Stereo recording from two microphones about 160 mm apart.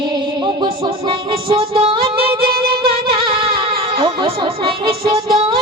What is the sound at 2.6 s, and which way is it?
Music, 70° right (ahead or behind).